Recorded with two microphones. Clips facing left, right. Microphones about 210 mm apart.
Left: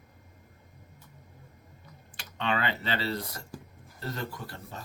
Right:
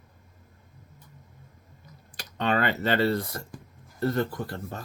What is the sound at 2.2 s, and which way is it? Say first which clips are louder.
Speech: right 5 dB; 40° right (ahead or behind).